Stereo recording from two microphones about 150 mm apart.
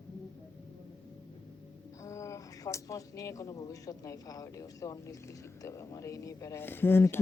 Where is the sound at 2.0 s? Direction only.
20° left (ahead or behind).